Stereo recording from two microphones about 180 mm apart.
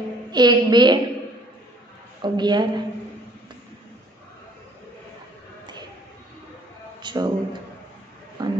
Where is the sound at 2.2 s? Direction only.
25° right (ahead or behind).